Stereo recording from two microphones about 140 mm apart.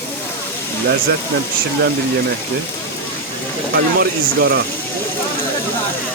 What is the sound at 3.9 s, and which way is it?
Speech, 90° right.